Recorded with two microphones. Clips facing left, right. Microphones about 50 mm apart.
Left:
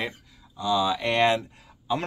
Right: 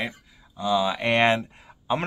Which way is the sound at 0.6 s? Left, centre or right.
Right.